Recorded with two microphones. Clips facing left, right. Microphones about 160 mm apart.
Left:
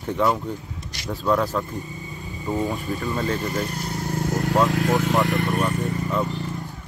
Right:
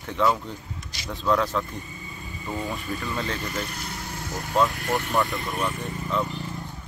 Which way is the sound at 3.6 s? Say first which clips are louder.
Left 7 dB; 40° left (ahead or behind).